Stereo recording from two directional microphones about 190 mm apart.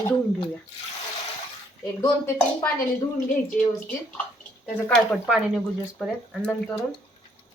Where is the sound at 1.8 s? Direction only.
15° left (ahead or behind).